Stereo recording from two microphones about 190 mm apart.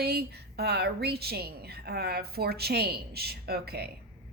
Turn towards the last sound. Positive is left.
turn(degrees=-55)  # may be behind; listen again after turning